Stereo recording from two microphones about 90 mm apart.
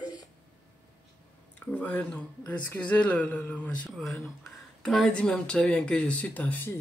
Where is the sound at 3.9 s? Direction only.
Centre (ahead or behind); by 6.7 s 15° left (ahead or behind).